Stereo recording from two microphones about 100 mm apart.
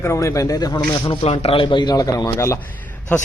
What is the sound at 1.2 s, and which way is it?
Speech, 90° left.